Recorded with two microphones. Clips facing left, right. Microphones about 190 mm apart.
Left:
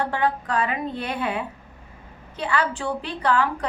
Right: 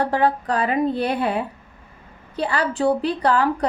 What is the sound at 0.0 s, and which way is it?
A woman's voice, 35° right (ahead or behind).